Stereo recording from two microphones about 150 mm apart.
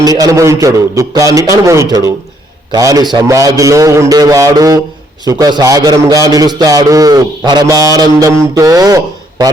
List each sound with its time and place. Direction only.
0.0 s a man's voice: 25° right (ahead or behind)